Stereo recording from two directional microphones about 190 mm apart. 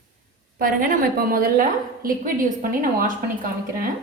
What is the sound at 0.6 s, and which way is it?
A woman's voice, 50° right (ahead or behind).